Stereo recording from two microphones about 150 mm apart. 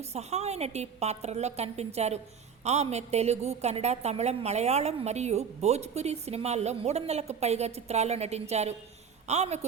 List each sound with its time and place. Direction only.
0.1 s a woman's voice: 45° right (ahead or behind)